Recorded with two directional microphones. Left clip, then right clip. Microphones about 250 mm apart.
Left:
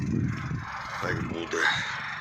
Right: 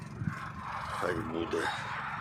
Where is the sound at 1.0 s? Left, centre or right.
Centre.